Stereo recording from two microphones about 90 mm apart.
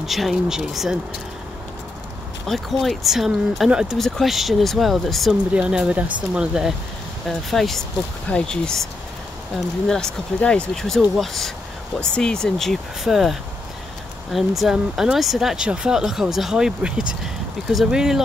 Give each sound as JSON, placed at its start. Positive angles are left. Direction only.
{"t": 0.0, "sound": "speech", "side_deg": 0}
{"t": 2.4, "sound": "speech", "side_deg": 0}
{"t": 5.5, "sound": "speech", "side_deg": -10}
{"t": 7.2, "sound": "speech", "side_deg": 0}
{"t": 9.8, "sound": "speech", "side_deg": 5}